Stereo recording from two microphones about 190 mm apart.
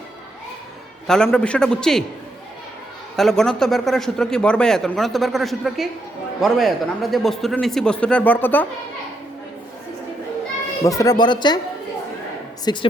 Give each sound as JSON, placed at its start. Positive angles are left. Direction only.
{"t": 1.0, "sound": "speech", "side_deg": 5}
{"t": 3.2, "sound": "speech", "side_deg": 0}
{"t": 10.8, "sound": "speech", "side_deg": 20}
{"t": 12.7, "sound": "speech", "side_deg": 20}